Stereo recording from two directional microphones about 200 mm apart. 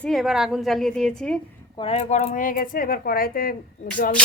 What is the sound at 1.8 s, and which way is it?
Speech, 30° left (ahead or behind).